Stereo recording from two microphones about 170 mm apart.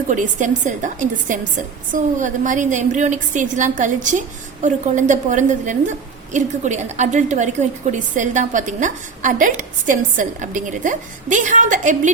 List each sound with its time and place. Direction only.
0.1 s a woman's voice: 45° right (ahead or behind)